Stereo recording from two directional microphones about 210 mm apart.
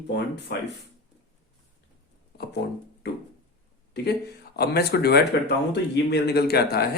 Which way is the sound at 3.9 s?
50° left (ahead or behind).